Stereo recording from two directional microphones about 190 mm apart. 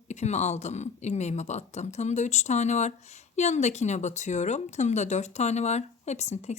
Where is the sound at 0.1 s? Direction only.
35° left (ahead or behind).